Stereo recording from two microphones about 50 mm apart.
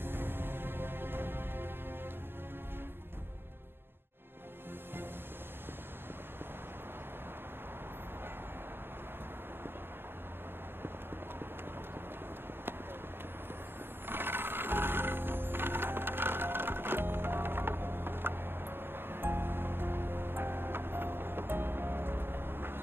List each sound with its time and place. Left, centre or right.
0.0 s music: right
14.0 s music: right